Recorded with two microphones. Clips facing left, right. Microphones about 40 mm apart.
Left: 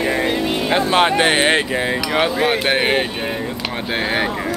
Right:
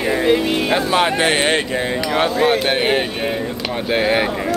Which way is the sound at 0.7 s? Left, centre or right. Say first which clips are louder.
Left 4 dB; left.